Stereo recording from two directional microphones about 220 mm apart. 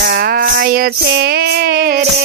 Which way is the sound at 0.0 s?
45° right (ahead or behind).